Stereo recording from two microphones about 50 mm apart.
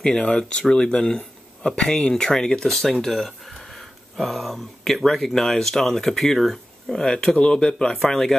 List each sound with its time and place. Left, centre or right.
0.0 s speech: centre